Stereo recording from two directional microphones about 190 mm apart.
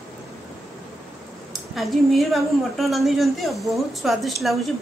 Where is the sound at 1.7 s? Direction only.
Centre (ahead or behind).